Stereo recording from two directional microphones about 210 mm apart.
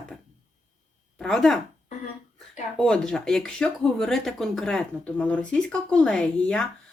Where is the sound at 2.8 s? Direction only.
5° left (ahead or behind).